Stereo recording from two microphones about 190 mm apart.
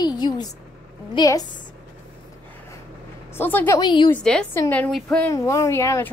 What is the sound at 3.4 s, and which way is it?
Speech, 10° left (ahead or behind).